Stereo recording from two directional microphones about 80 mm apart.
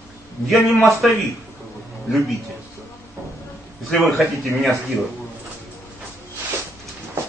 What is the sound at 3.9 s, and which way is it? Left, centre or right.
Speech, centre.